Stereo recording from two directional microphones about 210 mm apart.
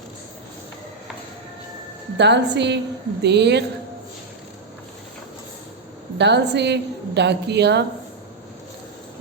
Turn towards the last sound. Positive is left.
turn(degrees=-55)  # may be behind; listen again after turning